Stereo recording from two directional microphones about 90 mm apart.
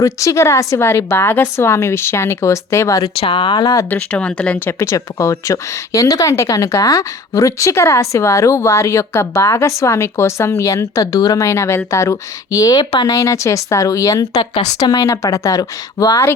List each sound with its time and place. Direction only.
0.0 s speech: 35° left (ahead or behind)
3.2 s speech: 70° left (ahead or behind)
3.8 s speech: 15° left (ahead or behind)
4.8 s speech: 35° left (ahead or behind)